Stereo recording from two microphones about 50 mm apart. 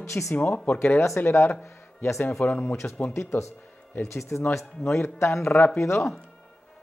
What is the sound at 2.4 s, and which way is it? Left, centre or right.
Speech, left.